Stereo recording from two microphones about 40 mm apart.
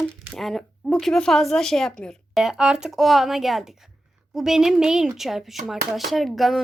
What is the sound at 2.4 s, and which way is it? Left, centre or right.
Speech, centre.